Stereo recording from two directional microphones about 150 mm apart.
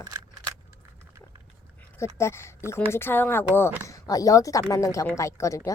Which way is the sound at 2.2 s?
20° left (ahead or behind).